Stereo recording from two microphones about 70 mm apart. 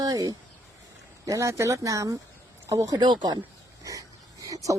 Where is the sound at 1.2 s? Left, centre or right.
Right.